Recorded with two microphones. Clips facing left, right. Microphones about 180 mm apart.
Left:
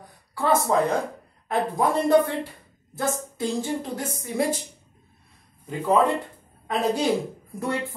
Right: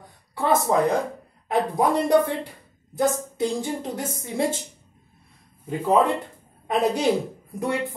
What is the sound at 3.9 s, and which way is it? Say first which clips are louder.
Speech: even; 25° right (ahead or behind).